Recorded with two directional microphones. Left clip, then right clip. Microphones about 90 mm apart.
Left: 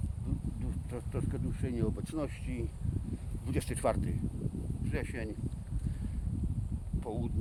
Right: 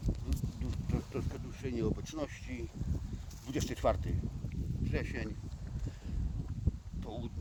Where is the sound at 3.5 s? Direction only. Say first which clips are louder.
Even; 55° left (ahead or behind).